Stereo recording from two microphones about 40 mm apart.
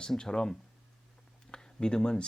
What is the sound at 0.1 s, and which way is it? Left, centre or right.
Speech, centre.